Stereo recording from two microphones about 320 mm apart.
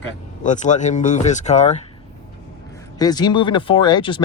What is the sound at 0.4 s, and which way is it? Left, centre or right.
Speech, left.